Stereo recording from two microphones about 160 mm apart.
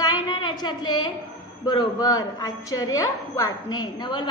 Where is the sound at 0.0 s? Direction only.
30° left (ahead or behind).